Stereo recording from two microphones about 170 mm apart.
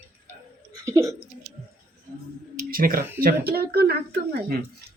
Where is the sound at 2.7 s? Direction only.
60° right (ahead or behind).